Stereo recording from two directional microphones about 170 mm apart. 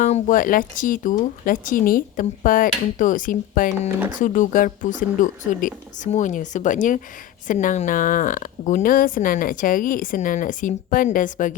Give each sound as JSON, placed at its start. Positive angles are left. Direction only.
{"t": 0.0, "sound": "speech", "side_deg": 50}